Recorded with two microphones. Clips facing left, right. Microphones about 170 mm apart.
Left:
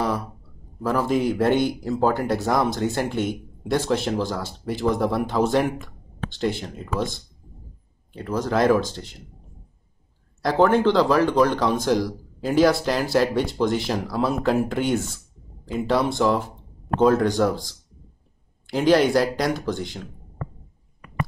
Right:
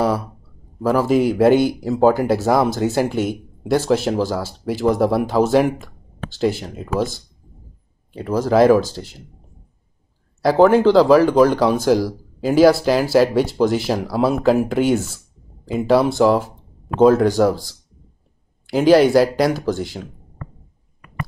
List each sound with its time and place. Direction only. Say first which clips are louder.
0.8 s speech: right 5 dB; 5° right (ahead or behind)
8.4 s speech: right 6 dB; 5° right (ahead or behind)
10.4 s speech: right 6 dB; 5° right (ahead or behind)
18.7 s speech: right 5 dB; 5° right (ahead or behind)